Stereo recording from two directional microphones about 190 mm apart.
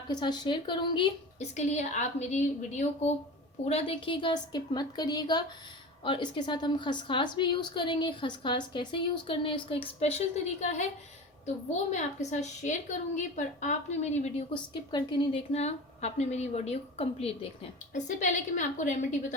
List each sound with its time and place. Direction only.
0.1 s a woman's voice: 20° left (ahead or behind); by 19.0 s 40° left (ahead or behind)